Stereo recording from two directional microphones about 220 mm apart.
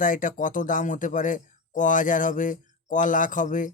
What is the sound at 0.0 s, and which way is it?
Speech, 35° left (ahead or behind).